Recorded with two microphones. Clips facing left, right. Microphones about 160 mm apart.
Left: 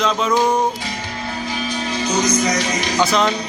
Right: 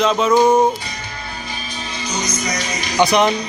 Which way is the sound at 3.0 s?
15° right (ahead or behind).